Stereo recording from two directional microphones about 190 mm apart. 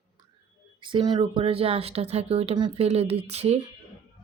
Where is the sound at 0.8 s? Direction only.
25° right (ahead or behind).